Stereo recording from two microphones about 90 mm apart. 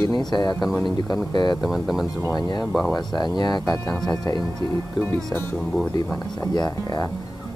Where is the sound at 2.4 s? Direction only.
50° left (ahead or behind).